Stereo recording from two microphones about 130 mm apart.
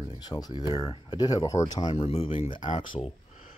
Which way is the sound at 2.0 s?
50° left (ahead or behind).